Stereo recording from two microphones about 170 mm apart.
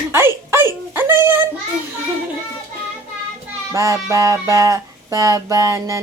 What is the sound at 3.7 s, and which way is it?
Speech, 20° right (ahead or behind).